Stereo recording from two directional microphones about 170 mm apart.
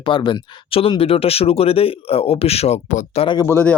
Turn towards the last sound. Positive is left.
turn(degrees=10)  # may be behind; listen again after turning